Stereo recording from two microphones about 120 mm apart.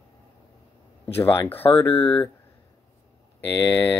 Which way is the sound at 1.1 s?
15° left (ahead or behind).